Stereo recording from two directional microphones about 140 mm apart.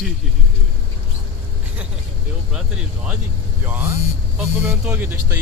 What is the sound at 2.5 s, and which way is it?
A man's voice, 5° right (ahead or behind).